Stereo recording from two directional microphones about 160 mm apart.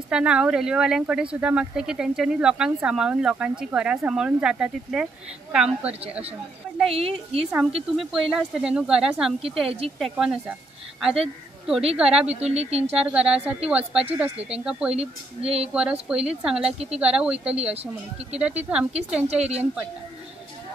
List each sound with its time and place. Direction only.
0.1 s speech: 5° right (ahead or behind)
6.9 s speech: 40° right (ahead or behind)
7.9 s speech: centre (ahead or behind)
12.4 s speech: 40° right (ahead or behind)
12.9 s speech: 5° right (ahead or behind)
14.9 s speech: 40° right (ahead or behind)
15.7 s speech: 5° right (ahead or behind)
16.6 s speech: 40° right (ahead or behind)
17.0 s speech: 5° right (ahead or behind)
18.6 s speech: 5° right (ahead or behind)
19.2 s speech: 40° right (ahead or behind)